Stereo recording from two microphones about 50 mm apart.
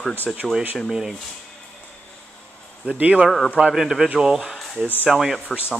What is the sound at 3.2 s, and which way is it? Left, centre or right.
Speech, centre.